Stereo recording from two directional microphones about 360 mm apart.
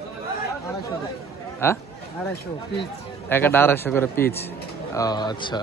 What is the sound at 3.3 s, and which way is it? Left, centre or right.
A man's voice, centre.